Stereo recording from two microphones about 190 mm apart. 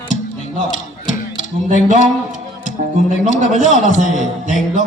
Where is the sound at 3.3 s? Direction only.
40° left (ahead or behind).